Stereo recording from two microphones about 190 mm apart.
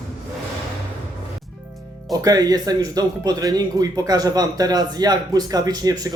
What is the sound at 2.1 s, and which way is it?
Speech, 20° right (ahead or behind).